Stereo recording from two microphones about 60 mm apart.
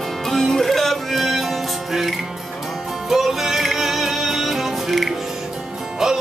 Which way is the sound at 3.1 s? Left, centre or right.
Centre.